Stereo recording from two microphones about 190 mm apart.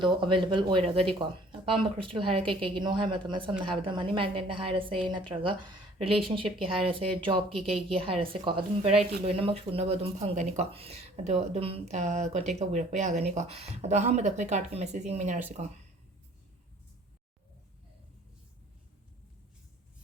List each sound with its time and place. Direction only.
0.0 s a woman's voice: 25° right (ahead or behind)
7.5 s a woman's voice: centre (ahead or behind)
7.9 s a woman's voice: 30° right (ahead or behind)